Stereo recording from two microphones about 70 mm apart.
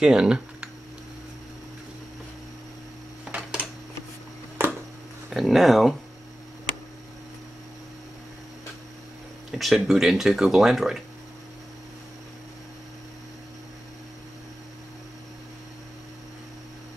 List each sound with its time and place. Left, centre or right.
0.0 s speech: centre
3.3 s a sound: centre
5.3 s speech: centre
9.5 s speech: centre